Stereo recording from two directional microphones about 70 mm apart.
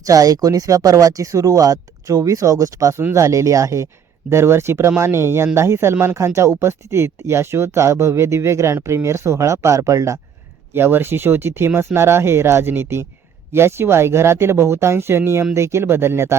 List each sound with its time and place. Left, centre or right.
0.0 s speech: right
10.8 s speech: right